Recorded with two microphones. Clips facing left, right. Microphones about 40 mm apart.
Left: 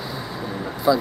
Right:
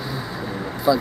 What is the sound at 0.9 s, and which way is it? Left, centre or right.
Speech, centre.